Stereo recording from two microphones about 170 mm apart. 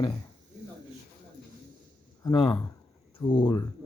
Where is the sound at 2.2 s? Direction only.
30° left (ahead or behind).